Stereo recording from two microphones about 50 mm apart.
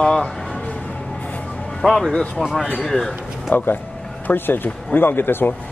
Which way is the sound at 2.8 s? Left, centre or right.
Centre.